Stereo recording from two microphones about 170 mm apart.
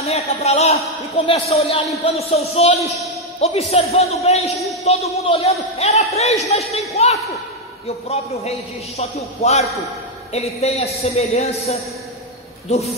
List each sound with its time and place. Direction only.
0.0 s a man's voice: 40° left (ahead or behind)